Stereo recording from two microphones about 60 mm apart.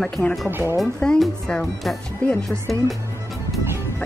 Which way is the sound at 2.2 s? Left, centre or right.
Centre.